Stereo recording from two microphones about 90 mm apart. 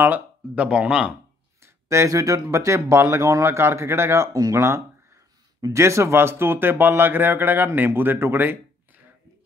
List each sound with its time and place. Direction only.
0.0 s speech: 20° right (ahead or behind)
1.9 s speech: 35° right (ahead or behind)